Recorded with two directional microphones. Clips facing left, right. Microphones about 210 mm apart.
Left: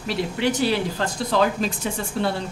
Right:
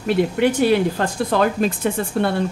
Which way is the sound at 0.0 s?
55° right (ahead or behind).